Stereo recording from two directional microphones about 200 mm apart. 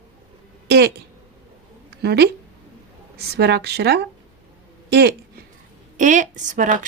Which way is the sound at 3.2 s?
55° right (ahead or behind).